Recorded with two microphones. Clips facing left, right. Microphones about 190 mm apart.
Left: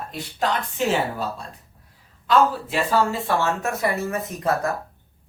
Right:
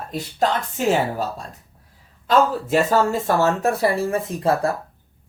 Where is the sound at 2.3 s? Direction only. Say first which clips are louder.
Right 2 dB; 45° right (ahead or behind).